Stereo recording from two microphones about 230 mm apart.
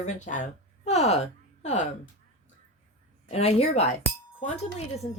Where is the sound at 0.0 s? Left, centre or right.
Left.